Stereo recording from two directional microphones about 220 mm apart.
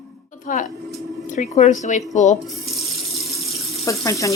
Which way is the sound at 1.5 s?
30° left (ahead or behind).